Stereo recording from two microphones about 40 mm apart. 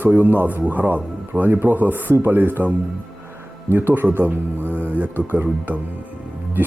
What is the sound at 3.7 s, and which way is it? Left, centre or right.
A man's voice, right.